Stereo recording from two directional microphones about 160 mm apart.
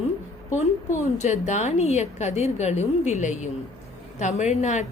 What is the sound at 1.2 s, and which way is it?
Speech, 45° left (ahead or behind).